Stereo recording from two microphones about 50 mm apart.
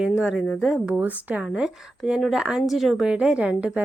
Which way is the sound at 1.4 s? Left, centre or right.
Centre.